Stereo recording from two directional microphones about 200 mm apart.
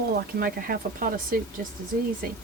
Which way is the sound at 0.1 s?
50° right (ahead or behind).